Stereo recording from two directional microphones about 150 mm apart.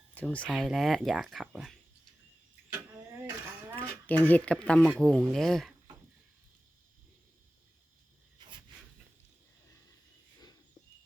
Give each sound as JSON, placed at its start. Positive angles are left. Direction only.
{"t": 0.1, "sound": "speech", "side_deg": 10}
{"t": 3.8, "sound": "speech", "side_deg": 10}
{"t": 8.4, "sound": "a sound", "side_deg": -30}